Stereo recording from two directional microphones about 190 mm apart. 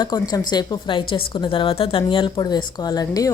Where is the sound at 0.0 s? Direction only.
20° left (ahead or behind).